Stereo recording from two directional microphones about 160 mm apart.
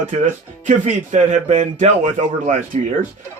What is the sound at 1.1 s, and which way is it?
Speech, 45° right (ahead or behind).